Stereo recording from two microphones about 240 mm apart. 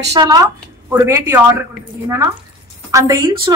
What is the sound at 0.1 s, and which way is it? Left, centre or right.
A woman's voice, centre.